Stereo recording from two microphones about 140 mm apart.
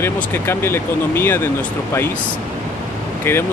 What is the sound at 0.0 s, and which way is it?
Speech, 15° left (ahead or behind).